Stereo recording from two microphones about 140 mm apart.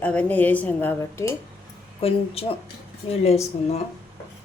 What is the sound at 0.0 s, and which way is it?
A woman's voice, 10° left (ahead or behind).